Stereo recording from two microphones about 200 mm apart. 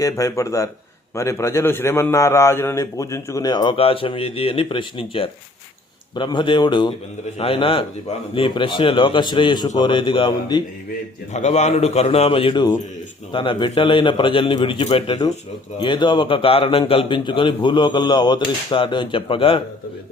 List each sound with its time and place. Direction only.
0.0 s a man's voice: 15° left (ahead or behind)
11.3 s a man's voice: 35° left (ahead or behind)